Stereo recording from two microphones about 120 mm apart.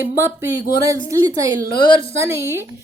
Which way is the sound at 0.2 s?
25° right (ahead or behind).